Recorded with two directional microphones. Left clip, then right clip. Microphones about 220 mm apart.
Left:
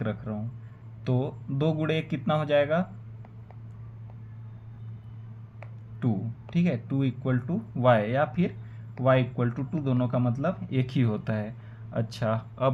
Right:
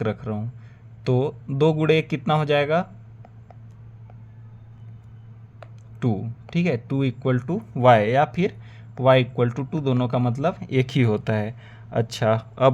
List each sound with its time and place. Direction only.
0.0 s speech: 50° right (ahead or behind)
6.0 s speech: 50° right (ahead or behind)